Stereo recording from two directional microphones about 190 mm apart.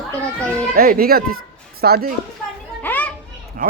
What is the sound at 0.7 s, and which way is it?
A child's voice, 50° right (ahead or behind).